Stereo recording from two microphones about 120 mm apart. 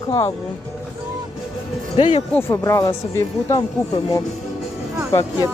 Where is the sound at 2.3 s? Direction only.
20° left (ahead or behind).